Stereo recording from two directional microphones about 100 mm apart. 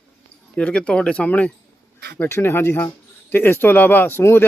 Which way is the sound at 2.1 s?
25° left (ahead or behind).